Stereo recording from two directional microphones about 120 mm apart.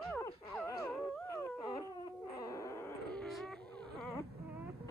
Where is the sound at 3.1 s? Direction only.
Centre (ahead or behind).